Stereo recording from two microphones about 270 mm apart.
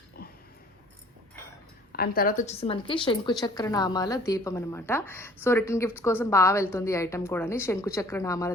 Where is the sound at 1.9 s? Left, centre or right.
Left.